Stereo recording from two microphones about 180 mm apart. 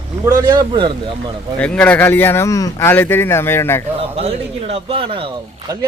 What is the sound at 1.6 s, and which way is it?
Speech, 5° left (ahead or behind).